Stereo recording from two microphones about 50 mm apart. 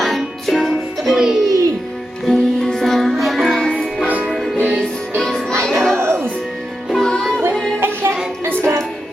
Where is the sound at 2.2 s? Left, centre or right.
Centre.